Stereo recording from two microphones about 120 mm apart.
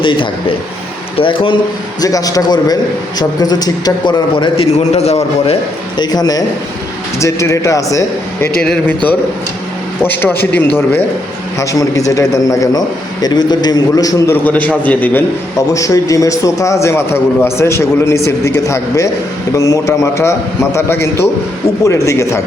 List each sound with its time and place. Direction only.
0.0 s speech: 45° left (ahead or behind)
2.0 s a man's voice: 30° left (ahead or behind); by 5.5 s 60° left (ahead or behind)
6.0 s a man's voice: 35° left (ahead or behind)
8.6 s a man's voice: 5° left (ahead or behind)
10.0 s a man's voice: 15° left (ahead or behind)
14.4 s a man's voice: 10° left (ahead or behind)
15.5 s a man's voice: 25° left (ahead or behind)